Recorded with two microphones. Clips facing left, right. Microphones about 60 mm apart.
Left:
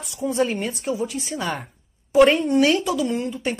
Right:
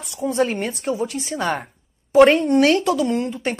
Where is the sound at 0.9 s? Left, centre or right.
Right.